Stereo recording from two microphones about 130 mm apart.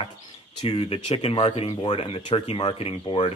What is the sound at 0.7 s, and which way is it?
Speech, 45° left (ahead or behind).